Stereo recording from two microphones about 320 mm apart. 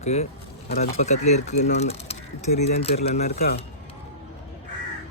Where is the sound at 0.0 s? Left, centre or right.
Centre.